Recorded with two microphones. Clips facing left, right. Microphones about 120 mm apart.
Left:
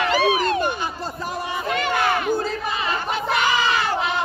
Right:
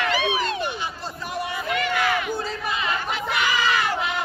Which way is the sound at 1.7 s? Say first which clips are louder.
Left 2 dB; 40° left (ahead or behind).